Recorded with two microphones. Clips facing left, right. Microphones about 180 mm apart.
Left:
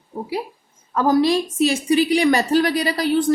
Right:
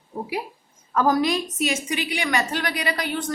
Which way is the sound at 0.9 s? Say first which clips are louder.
Left 4 dB; 25° left (ahead or behind).